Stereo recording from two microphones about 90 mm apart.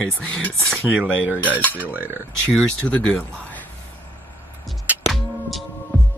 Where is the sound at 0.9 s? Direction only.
15° right (ahead or behind).